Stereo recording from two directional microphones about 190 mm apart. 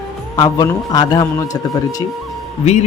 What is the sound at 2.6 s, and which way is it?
Speech, 35° left (ahead or behind).